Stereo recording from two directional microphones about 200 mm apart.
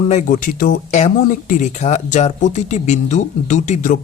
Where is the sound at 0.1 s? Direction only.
35° left (ahead or behind).